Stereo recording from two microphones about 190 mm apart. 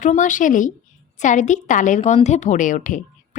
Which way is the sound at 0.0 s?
40° left (ahead or behind).